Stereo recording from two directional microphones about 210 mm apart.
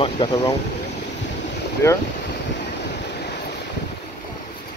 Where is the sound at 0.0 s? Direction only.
25° left (ahead or behind).